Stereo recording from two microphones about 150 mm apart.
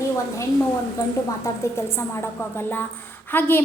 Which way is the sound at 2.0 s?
15° left (ahead or behind).